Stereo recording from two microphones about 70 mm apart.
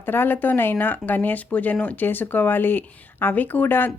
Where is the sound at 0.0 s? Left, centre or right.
Left.